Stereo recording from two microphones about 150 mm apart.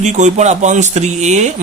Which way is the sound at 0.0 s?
50° right (ahead or behind).